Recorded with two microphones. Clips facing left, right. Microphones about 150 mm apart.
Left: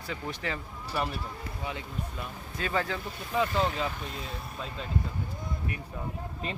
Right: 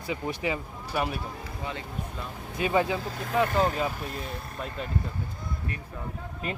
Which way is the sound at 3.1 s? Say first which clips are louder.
Right 3 dB; 90° right.